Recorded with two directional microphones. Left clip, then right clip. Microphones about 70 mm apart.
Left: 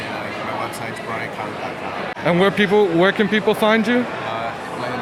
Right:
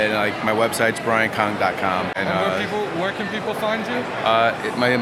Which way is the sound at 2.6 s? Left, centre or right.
Left.